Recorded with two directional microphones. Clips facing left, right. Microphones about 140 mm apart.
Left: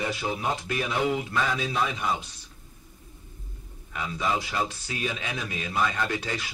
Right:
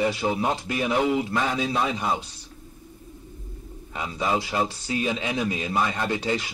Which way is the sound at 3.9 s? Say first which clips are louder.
Right 2 dB; 30° right (ahead or behind).